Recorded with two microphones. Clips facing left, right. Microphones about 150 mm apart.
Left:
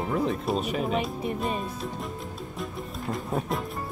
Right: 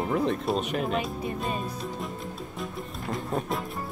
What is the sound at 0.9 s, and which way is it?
Speech, 20° left (ahead or behind).